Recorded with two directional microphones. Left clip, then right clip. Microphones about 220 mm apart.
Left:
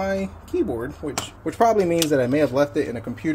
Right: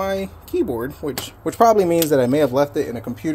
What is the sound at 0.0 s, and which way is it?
Speech, 20° right (ahead or behind).